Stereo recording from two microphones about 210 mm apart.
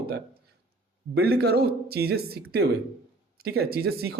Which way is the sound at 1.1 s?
50° right (ahead or behind).